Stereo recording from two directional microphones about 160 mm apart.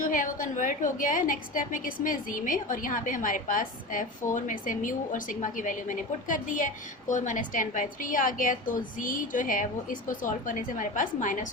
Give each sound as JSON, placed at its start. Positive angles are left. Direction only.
{"t": 0.0, "sound": "a woman's voice", "side_deg": 55}